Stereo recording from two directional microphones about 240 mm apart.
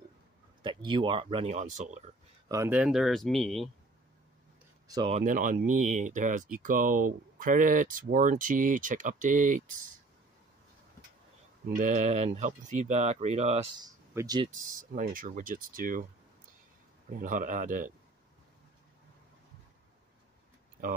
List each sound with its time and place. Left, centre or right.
0.6 s speech: centre
2.4 s speech: centre
4.8 s speech: centre
5.2 s speech: right
11.7 s speech: right
13.8 s speech: centre
14.8 s speech: right
17.1 s speech: right